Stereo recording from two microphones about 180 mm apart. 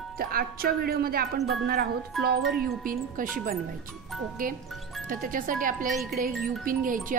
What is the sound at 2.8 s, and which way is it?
Speech, 50° right (ahead or behind).